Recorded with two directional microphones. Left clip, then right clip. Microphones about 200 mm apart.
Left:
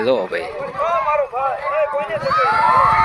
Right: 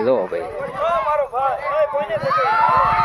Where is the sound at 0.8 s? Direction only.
50° left (ahead or behind).